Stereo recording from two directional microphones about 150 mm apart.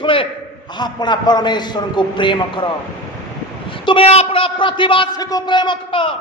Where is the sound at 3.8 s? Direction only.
40° left (ahead or behind).